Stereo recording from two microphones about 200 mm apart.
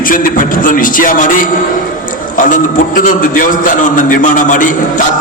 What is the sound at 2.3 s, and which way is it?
A man's voice, 40° left (ahead or behind).